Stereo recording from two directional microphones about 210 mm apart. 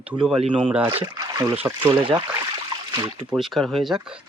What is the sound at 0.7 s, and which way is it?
Speech, 10° right (ahead or behind).